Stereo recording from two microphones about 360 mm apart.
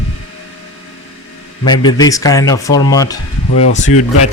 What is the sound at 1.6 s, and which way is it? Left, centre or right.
Speech, centre.